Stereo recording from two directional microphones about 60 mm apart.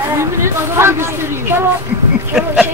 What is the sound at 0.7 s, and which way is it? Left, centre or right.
Speech, right.